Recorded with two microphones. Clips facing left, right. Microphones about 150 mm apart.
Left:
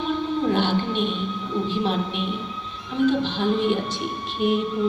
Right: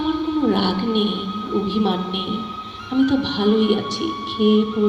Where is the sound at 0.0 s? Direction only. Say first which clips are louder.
Right 5 dB; 65° right (ahead or behind).